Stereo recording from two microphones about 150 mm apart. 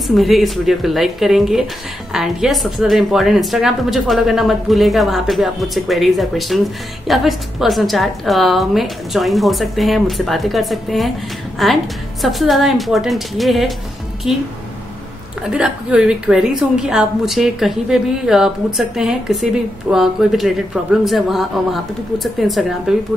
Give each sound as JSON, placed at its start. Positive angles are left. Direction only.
{"t": 0.2, "sound": "a woman's voice", "side_deg": 0}
{"t": 15.4, "sound": "a woman's voice", "side_deg": -5}